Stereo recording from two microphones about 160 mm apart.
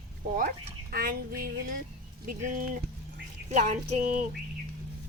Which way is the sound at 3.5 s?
50° right (ahead or behind).